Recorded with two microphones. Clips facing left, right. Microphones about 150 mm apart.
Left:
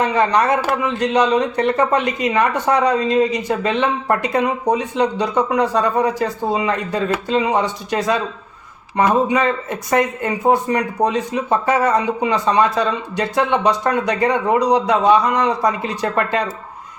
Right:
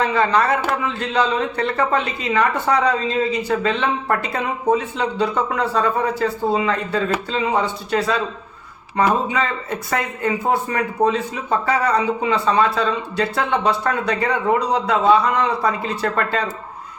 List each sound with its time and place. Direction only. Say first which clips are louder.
0.0 s a man's voice: left 2 dB; 20° left (ahead or behind)